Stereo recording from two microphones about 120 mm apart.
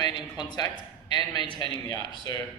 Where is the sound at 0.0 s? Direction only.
35° left (ahead or behind).